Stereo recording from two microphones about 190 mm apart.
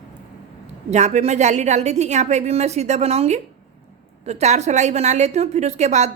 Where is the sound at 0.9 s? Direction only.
40° right (ahead or behind).